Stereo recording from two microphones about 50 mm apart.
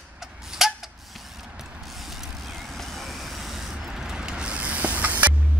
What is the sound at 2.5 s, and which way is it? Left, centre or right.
Vehicle, centre.